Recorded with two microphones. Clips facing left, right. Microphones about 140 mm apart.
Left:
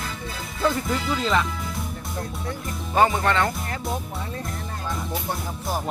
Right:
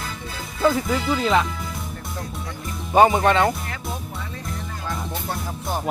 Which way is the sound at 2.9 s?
20° right (ahead or behind).